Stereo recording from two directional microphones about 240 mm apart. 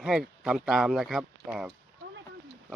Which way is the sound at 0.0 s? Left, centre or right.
Centre.